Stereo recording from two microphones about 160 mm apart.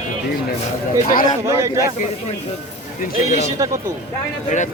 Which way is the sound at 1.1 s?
60° left (ahead or behind).